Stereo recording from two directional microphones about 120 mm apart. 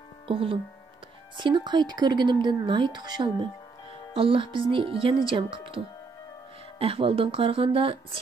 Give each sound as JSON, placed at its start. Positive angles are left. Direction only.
{"t": 0.3, "sound": "speech", "side_deg": -50}
{"t": 6.8, "sound": "speech", "side_deg": -50}